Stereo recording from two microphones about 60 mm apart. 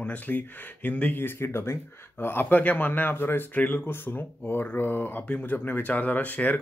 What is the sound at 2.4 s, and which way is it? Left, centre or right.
Speech, left.